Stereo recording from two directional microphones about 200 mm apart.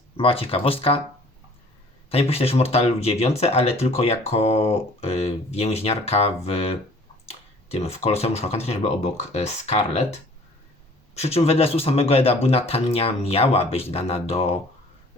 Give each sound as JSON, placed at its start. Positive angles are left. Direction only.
{"t": 0.2, "sound": "speech", "side_deg": 30}
{"t": 2.0, "sound": "speech", "side_deg": 30}
{"t": 11.1, "sound": "speech", "side_deg": 30}